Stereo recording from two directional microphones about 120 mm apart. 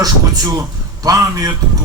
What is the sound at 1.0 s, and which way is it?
Music, 30° right (ahead or behind).